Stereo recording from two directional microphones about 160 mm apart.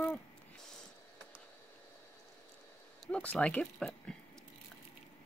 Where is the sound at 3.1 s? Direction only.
5° left (ahead or behind).